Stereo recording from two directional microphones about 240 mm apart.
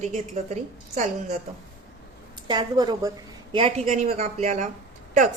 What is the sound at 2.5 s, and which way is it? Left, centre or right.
A woman's voice, centre.